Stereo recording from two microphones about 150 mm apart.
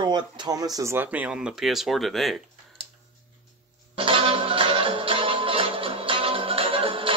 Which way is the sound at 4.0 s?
35° right (ahead or behind).